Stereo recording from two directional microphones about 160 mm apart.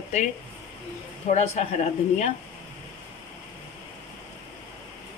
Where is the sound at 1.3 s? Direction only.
45° left (ahead or behind).